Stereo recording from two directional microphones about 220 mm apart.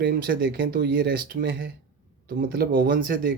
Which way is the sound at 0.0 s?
45° right (ahead or behind).